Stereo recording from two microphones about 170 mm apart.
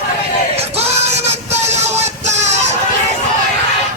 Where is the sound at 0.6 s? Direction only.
40° right (ahead or behind).